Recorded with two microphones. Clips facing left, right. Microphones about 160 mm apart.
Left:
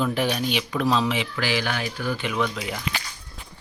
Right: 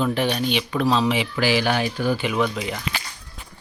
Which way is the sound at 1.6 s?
25° right (ahead or behind).